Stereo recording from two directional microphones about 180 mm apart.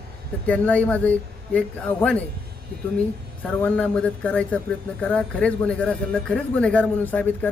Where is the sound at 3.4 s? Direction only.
10° left (ahead or behind).